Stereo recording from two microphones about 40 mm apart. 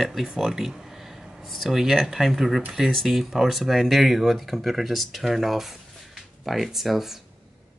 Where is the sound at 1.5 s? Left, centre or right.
Centre.